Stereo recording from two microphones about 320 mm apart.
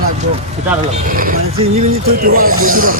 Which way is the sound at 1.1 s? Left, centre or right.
Right.